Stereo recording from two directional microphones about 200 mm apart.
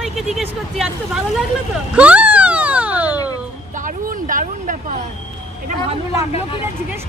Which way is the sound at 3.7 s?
40° right (ahead or behind).